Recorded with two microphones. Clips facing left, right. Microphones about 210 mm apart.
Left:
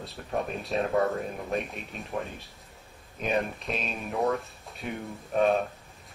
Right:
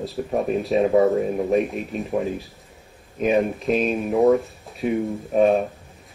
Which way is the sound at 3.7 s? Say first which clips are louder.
Right 14 dB; 45° right (ahead or behind).